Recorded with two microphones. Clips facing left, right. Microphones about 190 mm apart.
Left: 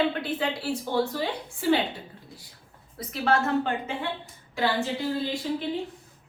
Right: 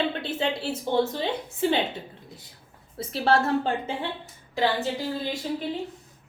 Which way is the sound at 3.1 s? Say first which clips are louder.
Right 2 dB; 30° right (ahead or behind).